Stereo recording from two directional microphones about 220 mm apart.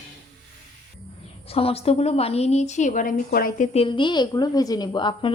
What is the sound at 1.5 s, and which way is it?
A woman's voice, 25° left (ahead or behind).